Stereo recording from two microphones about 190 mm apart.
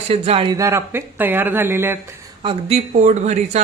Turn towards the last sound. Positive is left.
turn(degrees=-35)  # may be behind; listen again after turning